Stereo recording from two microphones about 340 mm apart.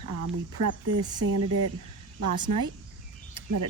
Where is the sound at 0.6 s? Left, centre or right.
Right.